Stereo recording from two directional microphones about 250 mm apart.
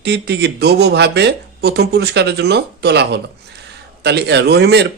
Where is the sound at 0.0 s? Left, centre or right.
Right.